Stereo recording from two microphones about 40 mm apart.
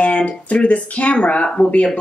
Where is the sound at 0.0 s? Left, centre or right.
Left.